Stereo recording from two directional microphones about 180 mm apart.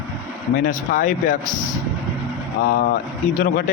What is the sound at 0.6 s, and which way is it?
Speech, 50° left (ahead or behind).